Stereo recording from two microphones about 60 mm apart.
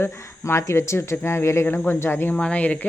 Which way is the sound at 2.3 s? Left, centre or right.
Left.